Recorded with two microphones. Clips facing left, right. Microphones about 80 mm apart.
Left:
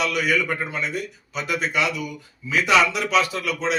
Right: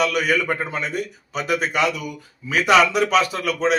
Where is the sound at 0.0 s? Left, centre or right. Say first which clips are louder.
Right 2 dB; right.